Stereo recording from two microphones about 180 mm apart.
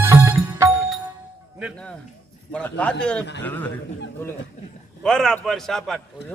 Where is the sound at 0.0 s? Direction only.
15° right (ahead or behind).